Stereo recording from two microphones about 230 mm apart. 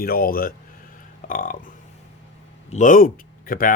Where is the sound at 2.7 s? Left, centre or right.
Left.